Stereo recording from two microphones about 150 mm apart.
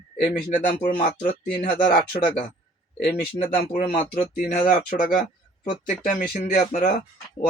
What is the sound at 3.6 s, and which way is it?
Speech, 90° left.